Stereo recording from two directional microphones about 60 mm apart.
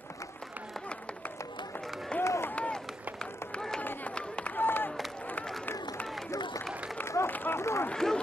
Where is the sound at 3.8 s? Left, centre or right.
Left.